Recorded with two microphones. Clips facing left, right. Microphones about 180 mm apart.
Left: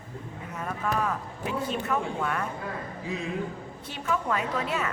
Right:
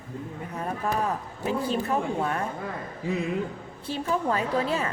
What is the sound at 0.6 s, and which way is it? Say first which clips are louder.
A woman's voice: right 1 dB; 35° right (ahead or behind).